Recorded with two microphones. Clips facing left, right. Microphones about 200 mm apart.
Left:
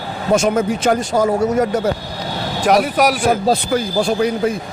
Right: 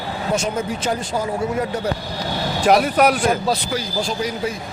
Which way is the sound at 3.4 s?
55° left (ahead or behind).